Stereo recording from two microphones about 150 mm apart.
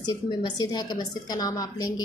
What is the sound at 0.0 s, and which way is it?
A woman's voice, 30° left (ahead or behind).